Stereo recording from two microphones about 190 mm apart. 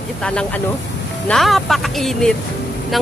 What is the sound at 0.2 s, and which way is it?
Speech, 5° left (ahead or behind).